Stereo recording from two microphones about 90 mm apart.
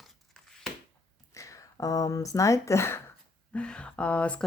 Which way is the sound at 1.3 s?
35° left (ahead or behind).